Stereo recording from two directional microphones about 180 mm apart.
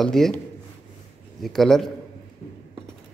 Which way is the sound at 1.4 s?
Centre (ahead or behind).